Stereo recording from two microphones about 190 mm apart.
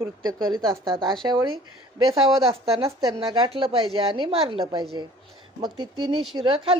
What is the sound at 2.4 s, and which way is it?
Speech, centre (ahead or behind).